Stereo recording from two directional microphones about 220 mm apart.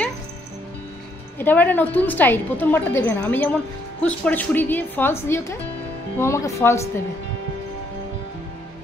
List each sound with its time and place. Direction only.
1.4 s a woman's voice: 10° left (ahead or behind)